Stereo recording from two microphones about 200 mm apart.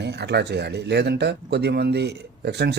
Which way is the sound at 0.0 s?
55° right (ahead or behind).